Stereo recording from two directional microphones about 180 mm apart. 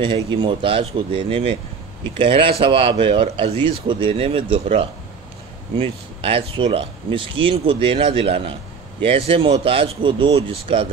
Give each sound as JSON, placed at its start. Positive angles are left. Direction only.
{"t": 0.0, "sound": "speech", "side_deg": -25}